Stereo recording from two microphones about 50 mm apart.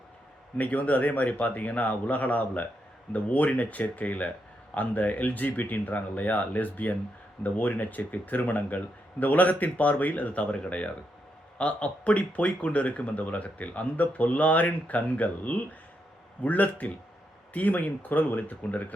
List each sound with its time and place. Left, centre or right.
0.5 s speech: left